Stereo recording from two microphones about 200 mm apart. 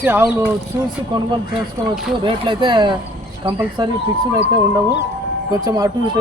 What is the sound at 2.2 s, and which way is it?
Speech, 25° right (ahead or behind).